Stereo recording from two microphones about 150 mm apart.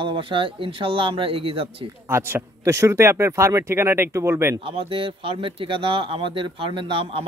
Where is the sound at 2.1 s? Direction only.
15° right (ahead or behind).